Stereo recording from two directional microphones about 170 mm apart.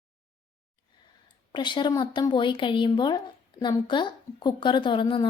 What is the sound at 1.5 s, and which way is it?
A woman's voice, 25° left (ahead or behind).